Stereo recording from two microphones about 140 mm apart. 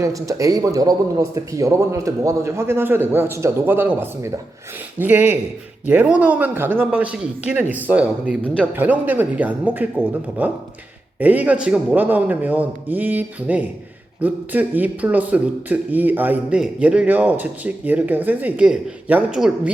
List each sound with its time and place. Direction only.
0.0 s speech: 25° right (ahead or behind); by 19.7 s 5° right (ahead or behind)